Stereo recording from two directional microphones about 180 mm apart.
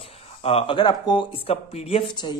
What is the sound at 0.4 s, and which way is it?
Speech, 35° left (ahead or behind).